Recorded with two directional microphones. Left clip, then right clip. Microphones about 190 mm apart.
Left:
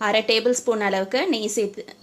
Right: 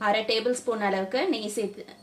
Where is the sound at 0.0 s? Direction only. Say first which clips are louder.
Left 5 dB; 40° left (ahead or behind).